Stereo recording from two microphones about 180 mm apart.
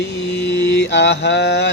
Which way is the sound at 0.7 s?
70° left (ahead or behind).